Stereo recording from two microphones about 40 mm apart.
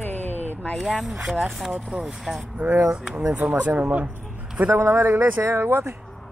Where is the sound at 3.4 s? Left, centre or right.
Right.